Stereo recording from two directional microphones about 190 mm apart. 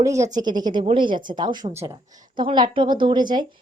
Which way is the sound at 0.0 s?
15° right (ahead or behind).